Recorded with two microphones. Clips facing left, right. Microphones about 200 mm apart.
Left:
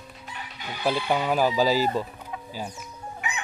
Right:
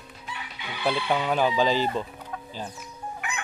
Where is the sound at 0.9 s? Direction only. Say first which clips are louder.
Left 1 dB; 5° left (ahead or behind).